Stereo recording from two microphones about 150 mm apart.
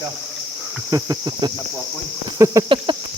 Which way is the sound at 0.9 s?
20° right (ahead or behind).